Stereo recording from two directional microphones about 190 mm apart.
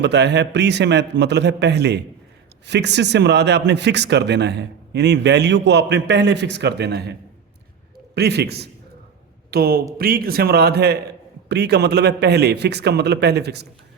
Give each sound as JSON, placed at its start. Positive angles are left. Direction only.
{"t": 0.0, "sound": "a man's voice", "side_deg": -65}
{"t": 8.1, "sound": "a man's voice", "side_deg": -60}